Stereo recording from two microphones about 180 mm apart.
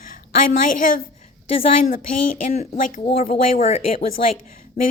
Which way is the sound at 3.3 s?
35° left (ahead or behind).